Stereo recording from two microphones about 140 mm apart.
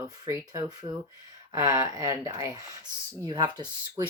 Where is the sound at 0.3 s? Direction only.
25° right (ahead or behind).